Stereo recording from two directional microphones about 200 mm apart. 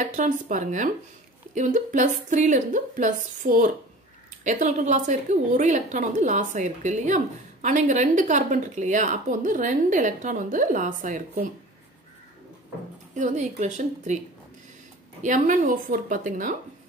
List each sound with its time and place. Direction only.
0.0 s a woman's voice: 40° right (ahead or behind)
13.1 s a woman's voice: 35° right (ahead or behind)
15.2 s a woman's voice: 40° right (ahead or behind)